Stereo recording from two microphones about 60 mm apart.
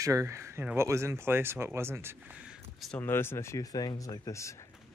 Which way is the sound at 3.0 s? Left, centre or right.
Left.